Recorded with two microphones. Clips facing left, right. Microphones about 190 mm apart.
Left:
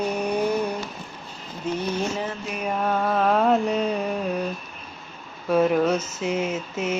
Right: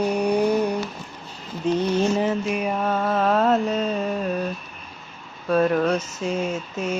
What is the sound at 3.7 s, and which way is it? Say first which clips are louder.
Carnatic music: even; 15° left (ahead or behind).